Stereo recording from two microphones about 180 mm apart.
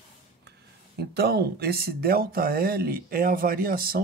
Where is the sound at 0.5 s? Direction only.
60° right (ahead or behind).